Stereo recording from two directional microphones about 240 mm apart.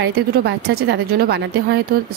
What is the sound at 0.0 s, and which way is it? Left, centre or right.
A woman's voice, right.